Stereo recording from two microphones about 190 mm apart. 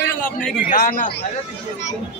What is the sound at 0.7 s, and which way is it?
Speech, 45° left (ahead or behind).